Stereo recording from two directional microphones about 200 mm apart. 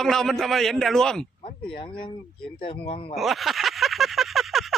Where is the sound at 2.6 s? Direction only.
25° left (ahead or behind).